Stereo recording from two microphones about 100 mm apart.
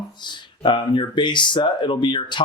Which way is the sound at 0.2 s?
50° left (ahead or behind).